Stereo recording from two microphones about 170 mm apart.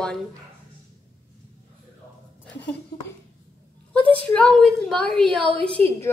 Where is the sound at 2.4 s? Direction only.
10° left (ahead or behind).